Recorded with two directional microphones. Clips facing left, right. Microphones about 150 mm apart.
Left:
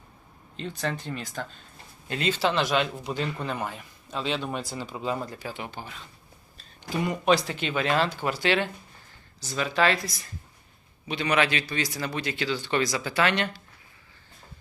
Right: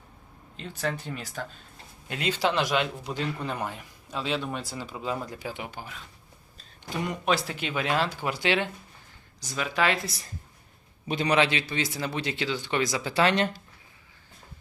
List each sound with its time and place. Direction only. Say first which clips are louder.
0.5 s a man's voice: left 1 dB; 5° right (ahead or behind)
5.4 s speech: even; 15° right (ahead or behind)
6.9 s speech: left 4 dB; 5° left (ahead or behind)
7.3 s speech: left 2 dB; 5° right (ahead or behind)
10.0 s speech: even; 30° right (ahead or behind)
11.3 s speech: even; 25° right (ahead or behind)